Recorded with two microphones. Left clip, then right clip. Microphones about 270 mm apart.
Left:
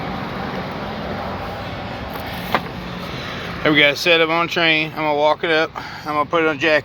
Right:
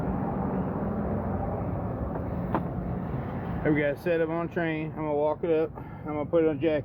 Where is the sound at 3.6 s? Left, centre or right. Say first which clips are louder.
Left 12 dB; centre.